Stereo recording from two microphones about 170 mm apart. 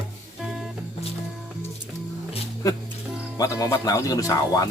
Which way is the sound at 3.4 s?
20° left (ahead or behind).